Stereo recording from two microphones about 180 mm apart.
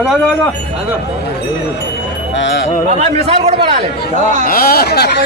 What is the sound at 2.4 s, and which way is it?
Music, 90° left.